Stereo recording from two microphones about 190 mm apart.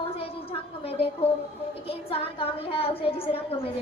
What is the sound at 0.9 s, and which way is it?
A woman's voice, 30° left (ahead or behind).